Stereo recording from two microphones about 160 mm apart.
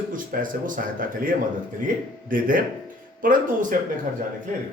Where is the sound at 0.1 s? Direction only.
60° right (ahead or behind).